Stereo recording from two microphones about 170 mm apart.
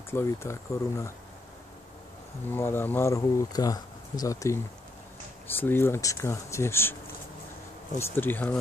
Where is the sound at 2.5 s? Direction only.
15° left (ahead or behind).